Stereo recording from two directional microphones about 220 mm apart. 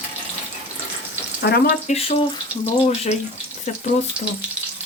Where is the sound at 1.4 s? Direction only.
50° left (ahead or behind).